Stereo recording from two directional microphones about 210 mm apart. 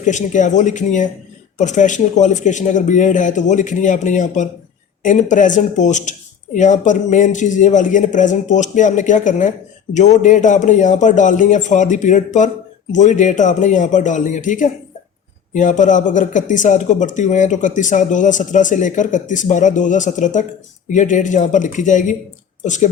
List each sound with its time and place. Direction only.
0.0 s speech: 35° left (ahead or behind)